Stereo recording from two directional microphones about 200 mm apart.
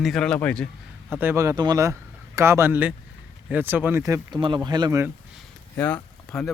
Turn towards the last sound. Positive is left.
turn(degrees=5)  # may be behind; listen again after turning